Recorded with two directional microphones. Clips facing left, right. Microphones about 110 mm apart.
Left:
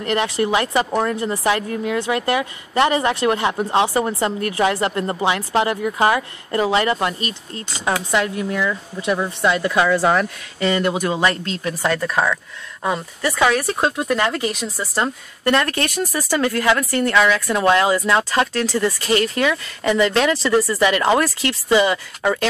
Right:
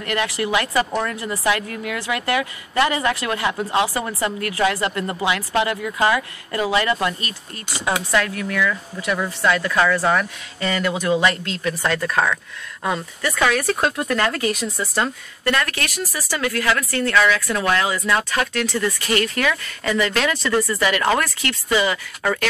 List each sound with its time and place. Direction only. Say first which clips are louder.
0.0 s speech: left 3 dB; 25° left (ahead or behind)
10.6 s speech: left 3 dB; 30° left (ahead or behind)
11.7 s speech: left 1 dB; 15° left (ahead or behind)
13.2 s speech: left 3 dB; 30° left (ahead or behind)
13.7 s speech: left 1 dB; 15° left (ahead or behind)
16.0 s speech: left 5 dB; 50° left (ahead or behind)
16.3 s speech: left 3 dB; 30° left (ahead or behind)
20.5 s speech: left 2 dB; 10° left (ahead or behind)
20.8 s speech: left 3 dB; 20° left (ahead or behind)